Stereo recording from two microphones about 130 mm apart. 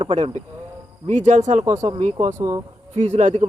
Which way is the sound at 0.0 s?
55° right (ahead or behind).